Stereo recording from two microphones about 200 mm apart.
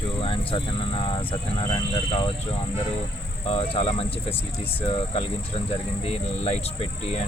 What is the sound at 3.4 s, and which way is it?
Speech, 30° left (ahead or behind).